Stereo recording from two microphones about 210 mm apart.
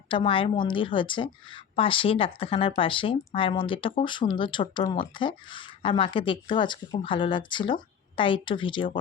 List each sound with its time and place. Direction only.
0.1 s a woman's voice: 25° left (ahead or behind)